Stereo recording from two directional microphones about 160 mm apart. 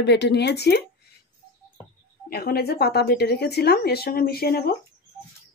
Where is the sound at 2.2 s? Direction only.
70° left (ahead or behind).